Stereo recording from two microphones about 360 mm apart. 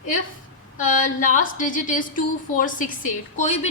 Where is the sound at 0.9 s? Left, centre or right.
Left.